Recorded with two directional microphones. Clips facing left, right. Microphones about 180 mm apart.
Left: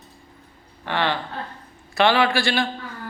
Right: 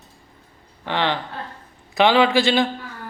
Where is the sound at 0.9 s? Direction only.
15° right (ahead or behind).